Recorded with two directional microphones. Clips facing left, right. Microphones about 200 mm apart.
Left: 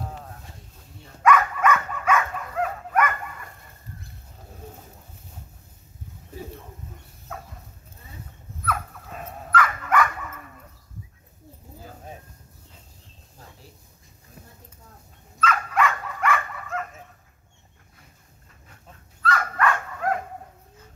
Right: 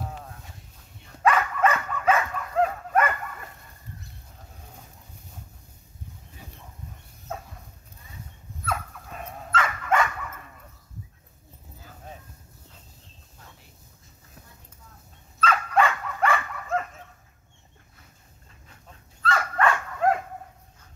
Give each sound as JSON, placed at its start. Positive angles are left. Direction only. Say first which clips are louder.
{"t": 1.2, "sound": "dog", "louder": "left 2 dB", "side_deg": -30}
{"t": 9.5, "sound": "dog", "louder": "left 2 dB", "side_deg": -25}
{"t": 15.4, "sound": "dog", "louder": "right 1 dB", "side_deg": -30}
{"t": 19.2, "sound": "dog", "louder": "even", "side_deg": -25}